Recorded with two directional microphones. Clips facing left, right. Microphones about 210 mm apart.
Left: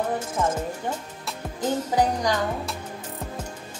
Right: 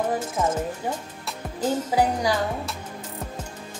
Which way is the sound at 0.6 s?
10° right (ahead or behind).